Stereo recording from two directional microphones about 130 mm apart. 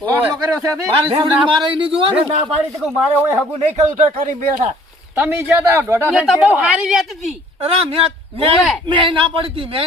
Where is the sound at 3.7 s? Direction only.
65° right (ahead or behind).